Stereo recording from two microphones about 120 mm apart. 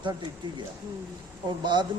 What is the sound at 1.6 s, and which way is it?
Speech, 40° right (ahead or behind).